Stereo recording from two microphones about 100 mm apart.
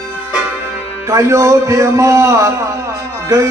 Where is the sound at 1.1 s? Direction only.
30° right (ahead or behind).